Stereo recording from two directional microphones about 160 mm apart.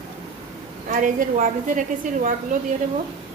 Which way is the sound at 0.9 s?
55° right (ahead or behind).